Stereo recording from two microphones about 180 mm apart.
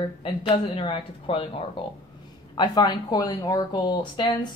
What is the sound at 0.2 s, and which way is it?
Speech, 30° left (ahead or behind).